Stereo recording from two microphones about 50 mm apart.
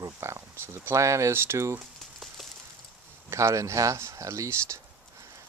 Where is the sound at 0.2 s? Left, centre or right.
Right.